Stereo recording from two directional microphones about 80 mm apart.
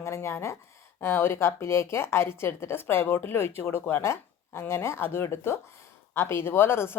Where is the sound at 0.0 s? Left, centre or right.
Left.